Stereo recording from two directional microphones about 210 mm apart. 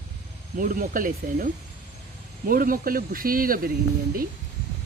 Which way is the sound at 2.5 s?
40° right (ahead or behind).